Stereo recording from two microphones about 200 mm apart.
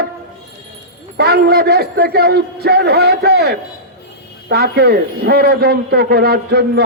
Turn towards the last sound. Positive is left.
turn(degrees=-55)  # may be behind; listen again after turning